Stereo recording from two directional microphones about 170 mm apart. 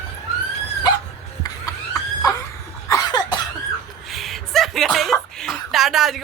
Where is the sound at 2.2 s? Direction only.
20° left (ahead or behind).